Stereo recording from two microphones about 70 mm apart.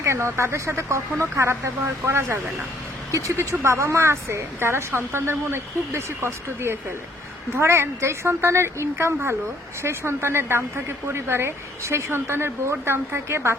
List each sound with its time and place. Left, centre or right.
0.0 s a woman's voice: right
3.1 s a woman's voice: right